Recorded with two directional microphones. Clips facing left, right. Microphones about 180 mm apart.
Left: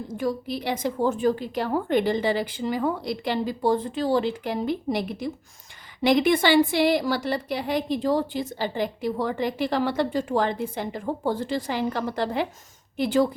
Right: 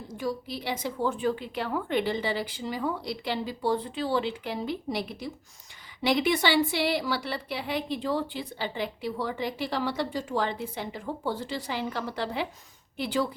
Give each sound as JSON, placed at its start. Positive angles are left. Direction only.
{"t": 0.1, "sound": "a woman's voice", "side_deg": 50}